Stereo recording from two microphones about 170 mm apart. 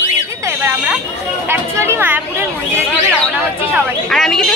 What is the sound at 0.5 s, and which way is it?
Buzzer, 10° right (ahead or behind).